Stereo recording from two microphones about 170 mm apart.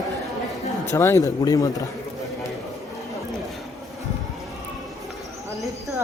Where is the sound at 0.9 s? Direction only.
15° left (ahead or behind).